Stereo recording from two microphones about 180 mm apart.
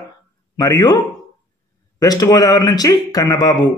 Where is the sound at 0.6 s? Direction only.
20° left (ahead or behind).